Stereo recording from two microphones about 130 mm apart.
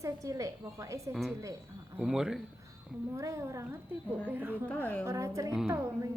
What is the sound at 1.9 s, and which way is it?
Speech, 5° right (ahead or behind).